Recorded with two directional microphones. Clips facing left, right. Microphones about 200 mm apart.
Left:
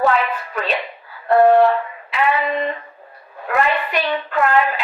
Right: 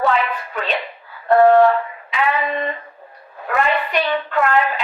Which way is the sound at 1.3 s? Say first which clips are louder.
Right 1 dB; centre (ahead or behind).